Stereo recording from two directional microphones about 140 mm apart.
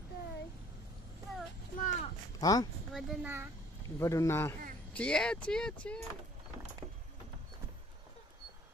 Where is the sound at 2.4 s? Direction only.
25° left (ahead or behind).